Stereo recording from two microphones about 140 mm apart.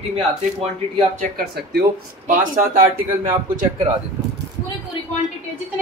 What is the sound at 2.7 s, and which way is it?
Speech, 75° right (ahead or behind).